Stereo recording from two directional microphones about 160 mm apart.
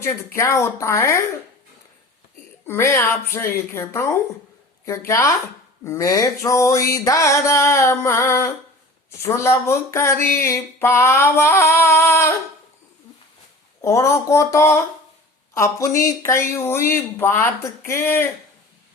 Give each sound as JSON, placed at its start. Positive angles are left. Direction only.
{"t": 0.3, "sound": "speech", "side_deg": 20}
{"t": 2.6, "sound": "speech", "side_deg": 15}
{"t": 5.8, "sound": "a sound", "side_deg": 20}
{"t": 9.0, "sound": "speech", "side_deg": 15}
{"t": 13.8, "sound": "speech", "side_deg": 20}